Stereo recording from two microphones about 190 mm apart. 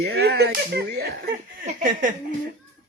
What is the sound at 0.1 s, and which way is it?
Speech, 60° right (ahead or behind).